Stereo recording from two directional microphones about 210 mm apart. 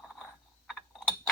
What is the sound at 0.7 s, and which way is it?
Mechanisms, 5° left (ahead or behind).